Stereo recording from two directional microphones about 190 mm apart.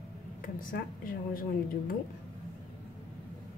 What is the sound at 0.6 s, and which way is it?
Speech, 45° left (ahead or behind).